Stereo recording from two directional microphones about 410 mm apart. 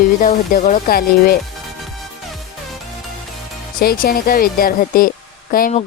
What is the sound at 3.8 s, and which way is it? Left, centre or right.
Speech, left.